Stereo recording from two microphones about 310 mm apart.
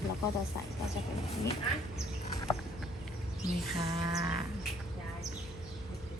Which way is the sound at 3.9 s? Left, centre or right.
Centre.